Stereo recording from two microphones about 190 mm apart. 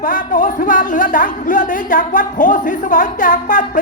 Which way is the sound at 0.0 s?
45° left (ahead or behind).